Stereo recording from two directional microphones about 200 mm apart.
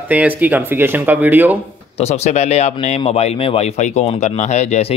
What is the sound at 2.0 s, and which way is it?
Speech, 30° left (ahead or behind).